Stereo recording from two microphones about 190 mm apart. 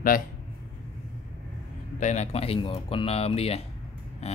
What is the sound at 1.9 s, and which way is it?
Speech, 40° left (ahead or behind).